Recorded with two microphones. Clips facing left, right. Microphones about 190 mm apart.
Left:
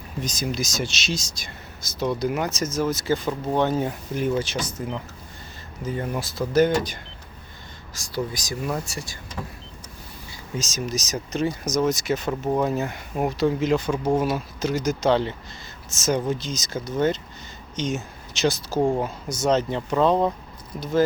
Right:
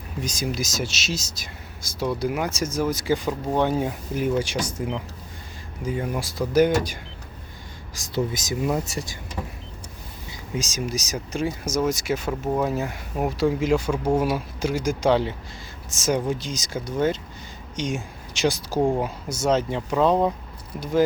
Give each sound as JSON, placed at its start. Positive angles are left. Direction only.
{"t": 0.2, "sound": "speech", "side_deg": -10}
{"t": 7.9, "sound": "speech", "side_deg": -20}
{"t": 10.5, "sound": "speech", "side_deg": -10}